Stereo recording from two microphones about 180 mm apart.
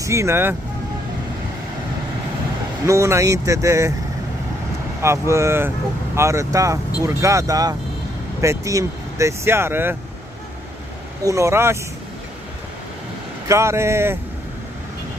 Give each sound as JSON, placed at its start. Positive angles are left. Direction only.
{"t": 0.0, "sound": "speech", "side_deg": -15}
{"t": 2.9, "sound": "speech", "side_deg": -15}
{"t": 5.0, "sound": "speech", "side_deg": -15}
{"t": 11.2, "sound": "speech", "side_deg": -15}
{"t": 13.5, "sound": "speech", "side_deg": -15}